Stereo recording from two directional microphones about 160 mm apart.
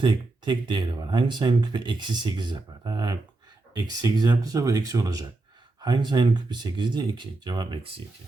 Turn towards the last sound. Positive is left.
turn(degrees=-30)  # may be behind; listen again after turning